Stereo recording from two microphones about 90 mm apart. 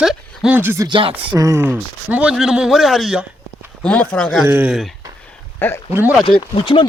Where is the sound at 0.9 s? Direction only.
70° right (ahead or behind).